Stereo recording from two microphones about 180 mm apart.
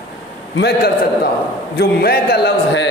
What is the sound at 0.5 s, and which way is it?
A man's voice, 65° left (ahead or behind).